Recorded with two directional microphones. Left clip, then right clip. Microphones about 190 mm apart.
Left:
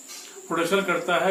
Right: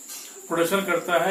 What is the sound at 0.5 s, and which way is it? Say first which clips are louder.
Speech: right 1 dB; 15° left (ahead or behind).